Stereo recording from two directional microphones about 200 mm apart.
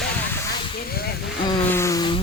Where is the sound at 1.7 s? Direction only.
15° left (ahead or behind).